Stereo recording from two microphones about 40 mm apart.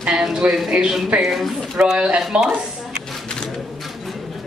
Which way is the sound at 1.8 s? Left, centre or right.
Right.